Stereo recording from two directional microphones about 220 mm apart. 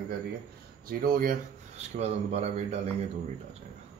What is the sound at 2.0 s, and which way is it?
Speech, 30° right (ahead or behind).